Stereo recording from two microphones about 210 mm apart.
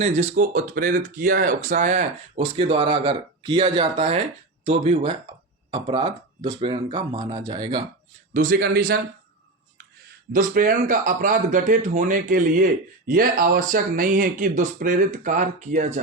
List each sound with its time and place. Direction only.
0.0 s speech: 30° right (ahead or behind)
8.3 s a man's voice: 40° right (ahead or behind)
10.3 s speech: 40° right (ahead or behind)